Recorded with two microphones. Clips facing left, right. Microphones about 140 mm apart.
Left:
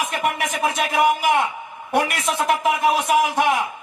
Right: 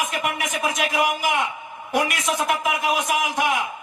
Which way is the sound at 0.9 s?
30° left (ahead or behind).